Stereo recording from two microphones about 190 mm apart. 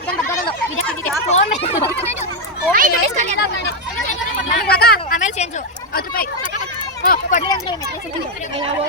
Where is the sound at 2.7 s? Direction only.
40° right (ahead or behind).